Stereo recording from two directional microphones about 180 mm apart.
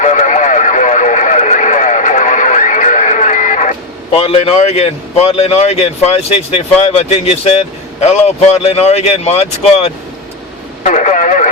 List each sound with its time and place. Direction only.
0.0 s radio: 45° left (ahead or behind)
8.0 s speech: 35° left (ahead or behind)
10.8 s radio: 40° left (ahead or behind)